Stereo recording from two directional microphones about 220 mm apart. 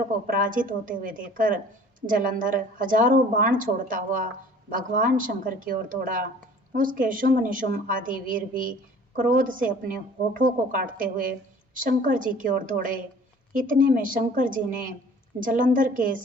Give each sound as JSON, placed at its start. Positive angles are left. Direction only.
{"t": 0.3, "sound": "a woman's voice", "side_deg": -40}